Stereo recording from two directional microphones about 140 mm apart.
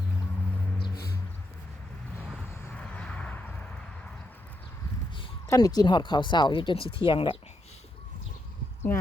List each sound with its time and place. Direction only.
2.1 s vehicle: centre (ahead or behind)
2.5 s vehicle: 20° left (ahead or behind)
5.5 s speech: 25° left (ahead or behind)